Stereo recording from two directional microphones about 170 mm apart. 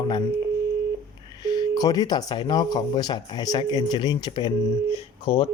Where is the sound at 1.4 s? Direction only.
25° left (ahead or behind).